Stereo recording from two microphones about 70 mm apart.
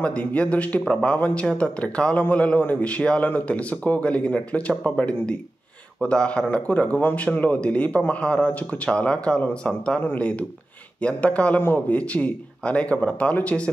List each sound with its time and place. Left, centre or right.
0.0 s speech: centre